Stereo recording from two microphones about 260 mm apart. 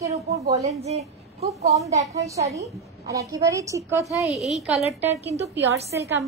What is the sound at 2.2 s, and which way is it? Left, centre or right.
A woman's voice, centre.